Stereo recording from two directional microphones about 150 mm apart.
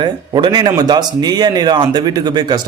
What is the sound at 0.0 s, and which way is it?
A man's voice, 30° right (ahead or behind).